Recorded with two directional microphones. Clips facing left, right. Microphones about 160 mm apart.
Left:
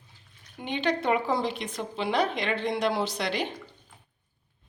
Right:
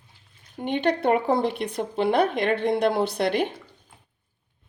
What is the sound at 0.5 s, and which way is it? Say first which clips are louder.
Speech: right 4 dB; 55° right (ahead or behind).